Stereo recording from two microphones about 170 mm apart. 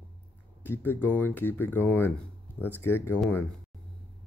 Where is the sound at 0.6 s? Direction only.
15° left (ahead or behind).